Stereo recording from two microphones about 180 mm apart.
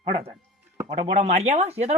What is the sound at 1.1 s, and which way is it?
Speech, 40° right (ahead or behind).